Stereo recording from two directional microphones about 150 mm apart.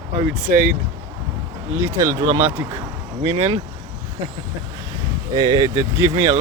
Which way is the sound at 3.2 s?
40° right (ahead or behind).